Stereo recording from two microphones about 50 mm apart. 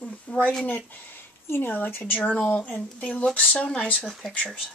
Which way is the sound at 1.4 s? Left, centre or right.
Left.